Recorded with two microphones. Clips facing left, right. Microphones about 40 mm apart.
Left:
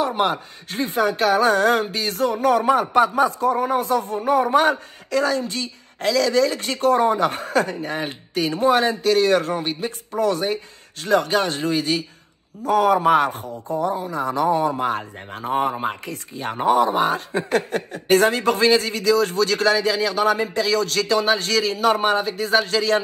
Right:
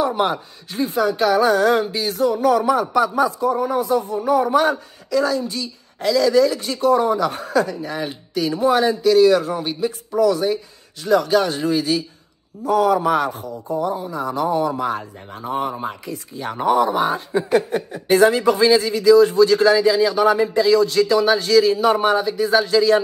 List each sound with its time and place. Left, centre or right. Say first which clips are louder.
0.7 s speech: right 1 dB; left
14.7 s speech: even; left
17.5 s speech: right 3 dB; left
21.9 s speech: right 2 dB; left